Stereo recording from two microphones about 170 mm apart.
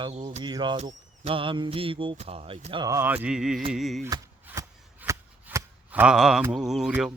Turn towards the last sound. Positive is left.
turn(degrees=-5)  # may be behind; listen again after turning